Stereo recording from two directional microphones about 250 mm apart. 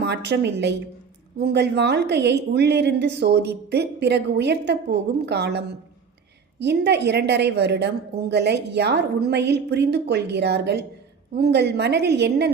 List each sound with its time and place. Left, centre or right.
0.0 s a woman's voice: right